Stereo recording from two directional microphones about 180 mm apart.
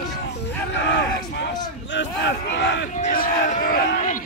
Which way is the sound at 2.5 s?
80° left.